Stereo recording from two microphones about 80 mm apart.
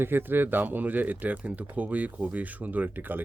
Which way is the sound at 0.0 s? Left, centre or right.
Right.